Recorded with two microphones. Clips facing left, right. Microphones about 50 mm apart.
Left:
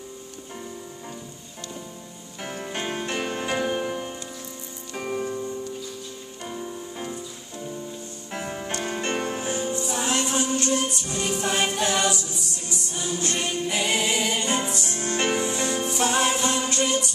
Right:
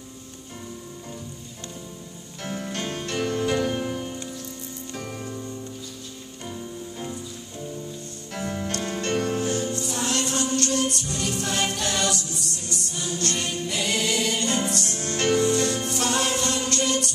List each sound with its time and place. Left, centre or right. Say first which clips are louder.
2.4 s music: even; centre
8.3 s music: right 1 dB; left